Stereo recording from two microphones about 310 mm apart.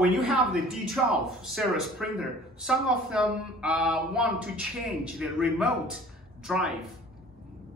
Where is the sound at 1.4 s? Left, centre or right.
Centre.